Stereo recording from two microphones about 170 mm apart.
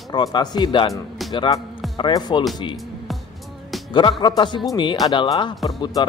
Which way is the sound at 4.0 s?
30° left (ahead or behind).